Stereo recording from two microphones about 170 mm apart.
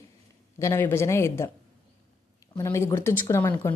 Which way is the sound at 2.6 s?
15° left (ahead or behind).